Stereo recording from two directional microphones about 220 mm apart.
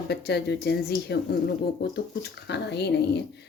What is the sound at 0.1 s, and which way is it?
Speech, 50° left (ahead or behind).